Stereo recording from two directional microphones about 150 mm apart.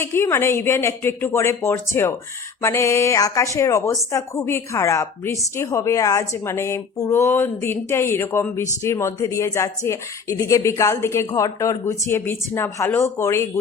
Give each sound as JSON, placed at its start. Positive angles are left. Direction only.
{"t": 0.0, "sound": "a woman's voice", "side_deg": 15}